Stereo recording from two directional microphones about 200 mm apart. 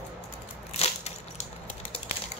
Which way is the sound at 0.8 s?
30° left (ahead or behind).